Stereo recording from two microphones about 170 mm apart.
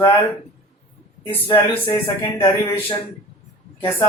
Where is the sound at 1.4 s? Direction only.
30° left (ahead or behind).